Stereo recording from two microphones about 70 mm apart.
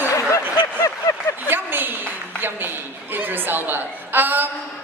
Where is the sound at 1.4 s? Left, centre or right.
Right.